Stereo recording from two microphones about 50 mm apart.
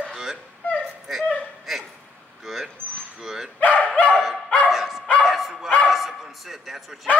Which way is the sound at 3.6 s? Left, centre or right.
Left.